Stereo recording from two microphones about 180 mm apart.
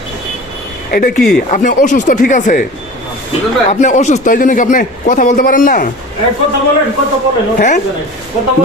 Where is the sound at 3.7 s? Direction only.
40° left (ahead or behind).